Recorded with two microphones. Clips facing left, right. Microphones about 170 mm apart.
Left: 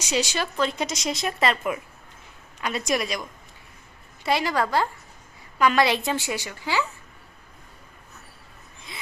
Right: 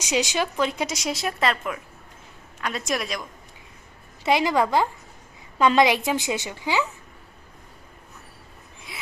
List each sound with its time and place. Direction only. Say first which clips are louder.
0.0 s a woman's voice: right 2 dB; 15° right (ahead or behind); by 3.2 s centre (ahead or behind)
4.3 s a woman's voice: right 3 dB; 15° right (ahead or behind)
8.9 s gasp: even; 10° right (ahead or behind)